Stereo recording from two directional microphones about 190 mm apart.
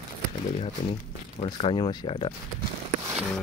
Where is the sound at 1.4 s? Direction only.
30° left (ahead or behind).